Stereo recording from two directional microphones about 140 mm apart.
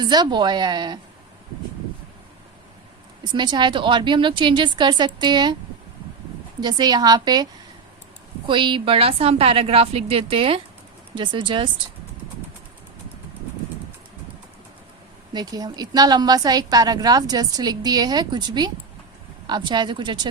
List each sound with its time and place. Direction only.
0.0 s a woman's voice: 30° right (ahead or behind)
3.3 s a woman's voice: 35° right (ahead or behind)
6.6 s a woman's voice: 30° right (ahead or behind)
8.4 s a woman's voice: 35° right (ahead or behind)
15.3 s a woman's voice: 30° right (ahead or behind)